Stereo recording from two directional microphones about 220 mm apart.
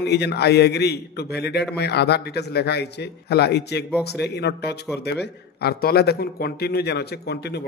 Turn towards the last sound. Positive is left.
turn(degrees=50)  # may be behind; listen again after turning